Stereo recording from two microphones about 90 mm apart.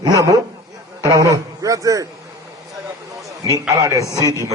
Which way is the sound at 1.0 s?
35° right (ahead or behind).